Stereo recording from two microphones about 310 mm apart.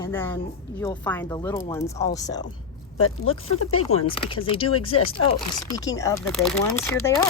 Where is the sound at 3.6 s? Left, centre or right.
Left.